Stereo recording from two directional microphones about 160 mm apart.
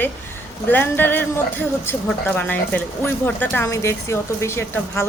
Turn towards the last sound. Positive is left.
turn(degrees=15)  # may be behind; listen again after turning